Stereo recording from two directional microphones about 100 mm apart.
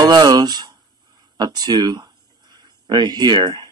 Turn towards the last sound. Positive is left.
turn(degrees=-50)  # may be behind; listen again after turning